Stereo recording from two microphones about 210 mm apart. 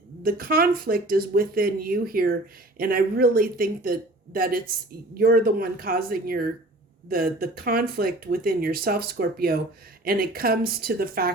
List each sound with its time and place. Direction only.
0.2 s speech: 45° right (ahead or behind)